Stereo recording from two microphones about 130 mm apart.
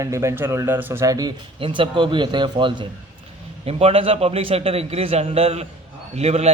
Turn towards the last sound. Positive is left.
turn(degrees=-55)  # may be behind; listen again after turning